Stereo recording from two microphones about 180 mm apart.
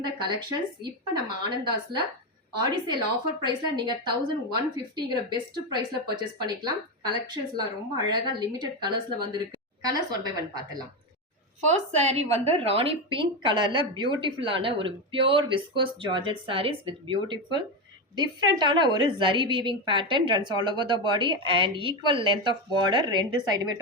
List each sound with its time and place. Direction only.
0.0 s a woman's voice: 25° right (ahead or behind)
11.6 s a woman's voice: 35° right (ahead or behind)
18.6 s a woman's voice: 25° right (ahead or behind)